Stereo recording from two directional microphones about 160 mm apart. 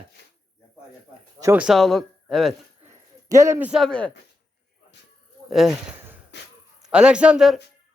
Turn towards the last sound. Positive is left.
turn(degrees=-5)  # may be behind; listen again after turning